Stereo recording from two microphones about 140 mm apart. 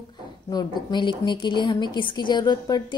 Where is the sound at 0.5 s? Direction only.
30° left (ahead or behind).